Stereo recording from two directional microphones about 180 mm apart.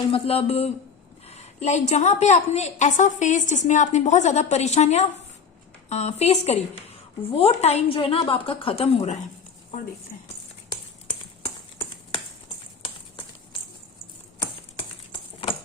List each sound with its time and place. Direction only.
0.1 s a woman's voice: 35° left (ahead or behind)